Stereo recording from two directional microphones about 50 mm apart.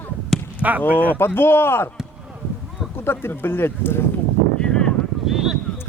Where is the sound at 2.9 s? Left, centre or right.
Left.